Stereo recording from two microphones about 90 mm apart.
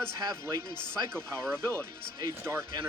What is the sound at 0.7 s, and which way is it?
Speech, 50° left (ahead or behind).